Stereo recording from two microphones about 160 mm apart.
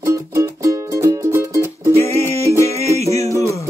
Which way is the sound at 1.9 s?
15° left (ahead or behind).